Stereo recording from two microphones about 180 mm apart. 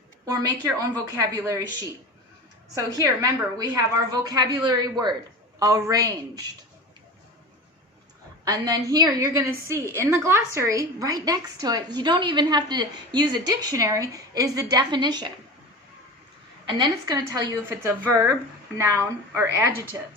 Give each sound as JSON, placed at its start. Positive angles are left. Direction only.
{"t": 0.3, "sound": "a woman's voice", "side_deg": -20}
{"t": 2.7, "sound": "a woman's voice", "side_deg": -20}
{"t": 8.4, "sound": "a woman's voice", "side_deg": -20}
{"t": 16.6, "sound": "a woman's voice", "side_deg": -25}